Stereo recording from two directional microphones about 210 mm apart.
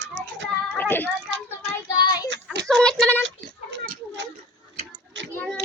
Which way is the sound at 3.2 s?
60° right (ahead or behind).